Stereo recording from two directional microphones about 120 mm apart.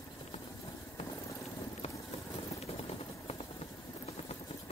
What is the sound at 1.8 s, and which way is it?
Vehicle, 55° left (ahead or behind).